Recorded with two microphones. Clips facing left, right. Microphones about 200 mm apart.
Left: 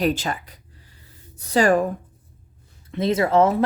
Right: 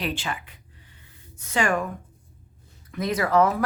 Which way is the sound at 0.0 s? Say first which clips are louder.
Left 7 dB; 40° left (ahead or behind).